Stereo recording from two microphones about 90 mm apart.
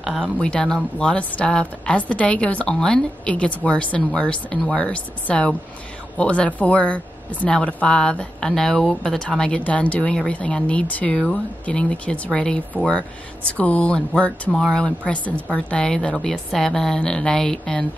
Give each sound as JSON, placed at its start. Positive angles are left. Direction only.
{"t": 0.0, "sound": "speech", "side_deg": -5}
{"t": 0.4, "sound": "speech", "side_deg": 10}